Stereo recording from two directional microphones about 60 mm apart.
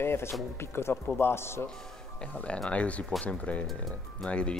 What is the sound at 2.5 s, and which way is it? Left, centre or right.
A man's voice, centre.